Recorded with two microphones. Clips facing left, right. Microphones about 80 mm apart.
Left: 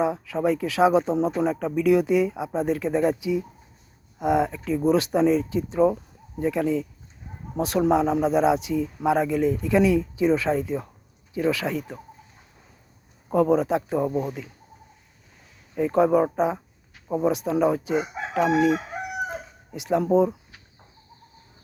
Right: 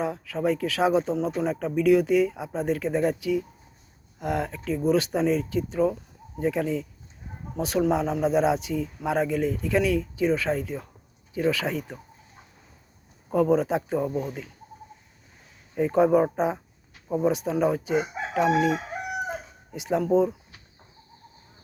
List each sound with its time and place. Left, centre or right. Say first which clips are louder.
0.0 s speech: left 3 dB; centre
1.1 s speech: left 3 dB; left
1.5 s speech: right 3 dB; centre
6.4 s chicken: left 2 dB; centre
7.7 s speech: left 3 dB; centre
11.3 s chicken: left 1 dB; centre
13.3 s chicken: left 2 dB; centre
14.1 s speech: left 3 dB; centre
15.7 s speech: left 1 dB; centre
16.2 s chicken: left 2 dB; centre